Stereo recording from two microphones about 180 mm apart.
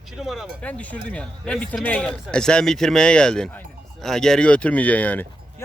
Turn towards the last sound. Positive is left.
turn(degrees=10)  # may be behind; listen again after turning